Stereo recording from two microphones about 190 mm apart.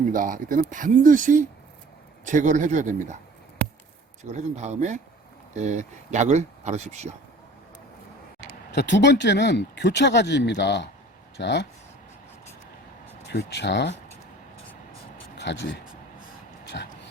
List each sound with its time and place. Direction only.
0.1 s speech: 45° right (ahead or behind)
4.2 s speech: 35° right (ahead or behind)
8.7 s speech: 65° left (ahead or behind)
13.2 s speech: 60° left (ahead or behind)
15.4 s speech: 65° left (ahead or behind)